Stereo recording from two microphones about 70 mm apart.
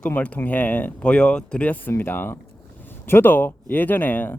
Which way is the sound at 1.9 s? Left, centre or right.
Left.